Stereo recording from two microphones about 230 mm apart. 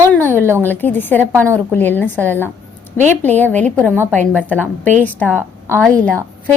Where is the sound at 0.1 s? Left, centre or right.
Centre.